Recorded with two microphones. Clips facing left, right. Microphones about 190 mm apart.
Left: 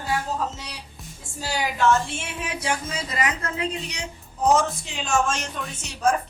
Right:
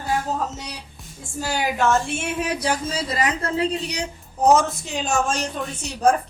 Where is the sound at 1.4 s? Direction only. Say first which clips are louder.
Right 2 dB; 50° right (ahead or behind).